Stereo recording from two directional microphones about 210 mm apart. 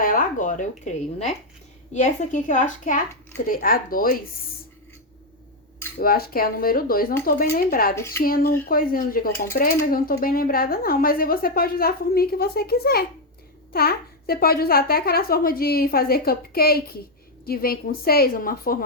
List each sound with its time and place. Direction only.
0.0 s speech: 40° left (ahead or behind)
6.0 s speech: 45° left (ahead or behind)